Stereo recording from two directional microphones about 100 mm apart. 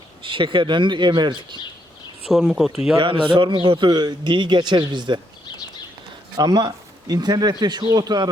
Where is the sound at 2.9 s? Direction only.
60° right (ahead or behind).